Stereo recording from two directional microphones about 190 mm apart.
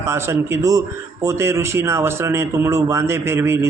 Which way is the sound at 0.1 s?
15° right (ahead or behind).